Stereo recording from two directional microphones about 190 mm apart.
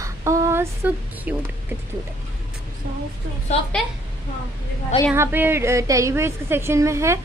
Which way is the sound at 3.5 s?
35° left (ahead or behind).